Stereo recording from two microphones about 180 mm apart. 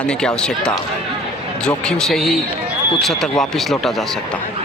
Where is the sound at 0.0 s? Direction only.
5° left (ahead or behind).